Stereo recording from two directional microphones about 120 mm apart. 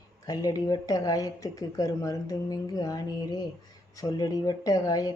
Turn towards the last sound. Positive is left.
turn(degrees=30)  # may be behind; listen again after turning